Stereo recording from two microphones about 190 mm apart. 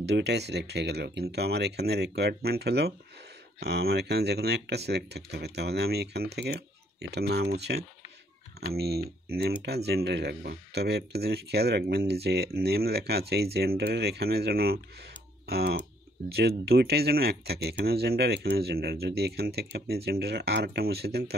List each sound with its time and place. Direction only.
0.0 s speech: 65° right (ahead or behind)